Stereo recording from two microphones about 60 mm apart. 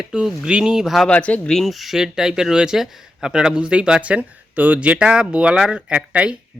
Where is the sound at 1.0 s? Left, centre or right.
Left.